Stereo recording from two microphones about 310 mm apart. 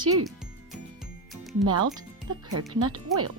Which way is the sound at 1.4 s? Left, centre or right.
Centre.